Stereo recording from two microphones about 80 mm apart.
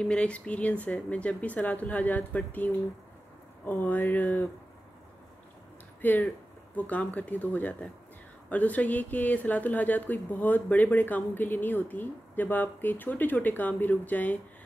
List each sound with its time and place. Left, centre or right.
0.0 s speech: centre
5.9 s speech: left